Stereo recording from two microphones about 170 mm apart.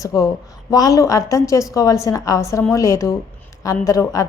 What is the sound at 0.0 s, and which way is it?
A woman's voice, 20° left (ahead or behind).